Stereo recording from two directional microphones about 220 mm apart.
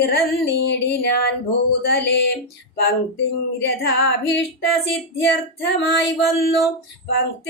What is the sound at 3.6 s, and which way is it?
Speech, 50° left (ahead or behind).